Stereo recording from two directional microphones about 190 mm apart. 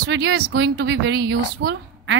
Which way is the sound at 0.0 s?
60° right (ahead or behind).